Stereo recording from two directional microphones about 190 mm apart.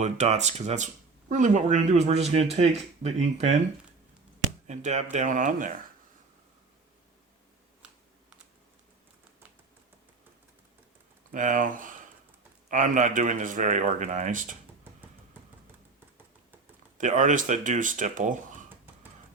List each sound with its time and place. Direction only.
0.0 s speech: 35° right (ahead or behind)
4.6 s speech: 40° right (ahead or behind)
11.3 s speech: 45° right (ahead or behind)
17.0 s speech: 40° right (ahead or behind)